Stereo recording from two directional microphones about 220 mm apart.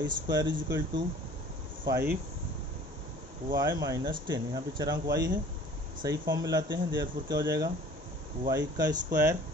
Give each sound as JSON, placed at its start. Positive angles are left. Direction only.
{"t": 0.0, "sound": "speech", "side_deg": -20}
{"t": 3.5, "sound": "speech", "side_deg": -15}